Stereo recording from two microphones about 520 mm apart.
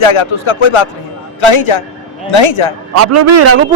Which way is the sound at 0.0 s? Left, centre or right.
Left.